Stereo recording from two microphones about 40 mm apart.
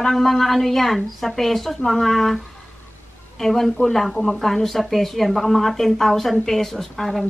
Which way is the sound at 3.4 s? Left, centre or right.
Centre.